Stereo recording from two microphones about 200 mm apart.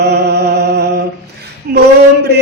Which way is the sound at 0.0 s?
55° right (ahead or behind).